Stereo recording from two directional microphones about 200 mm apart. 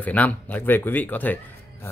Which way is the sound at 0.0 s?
5° left (ahead or behind).